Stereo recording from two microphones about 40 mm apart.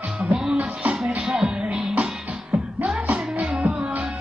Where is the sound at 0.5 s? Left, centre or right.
Right.